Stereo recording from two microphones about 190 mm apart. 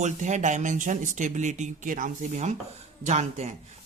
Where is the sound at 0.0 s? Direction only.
40° right (ahead or behind).